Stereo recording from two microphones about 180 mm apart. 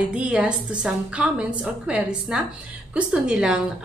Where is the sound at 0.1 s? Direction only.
5° right (ahead or behind).